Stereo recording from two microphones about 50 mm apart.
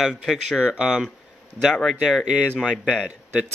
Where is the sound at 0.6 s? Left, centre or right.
Centre.